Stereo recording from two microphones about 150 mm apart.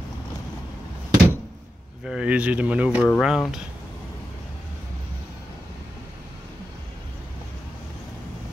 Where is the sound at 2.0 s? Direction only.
5° right (ahead or behind).